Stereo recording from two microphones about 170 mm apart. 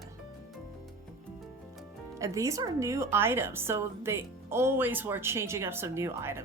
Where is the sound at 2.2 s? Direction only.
20° right (ahead or behind).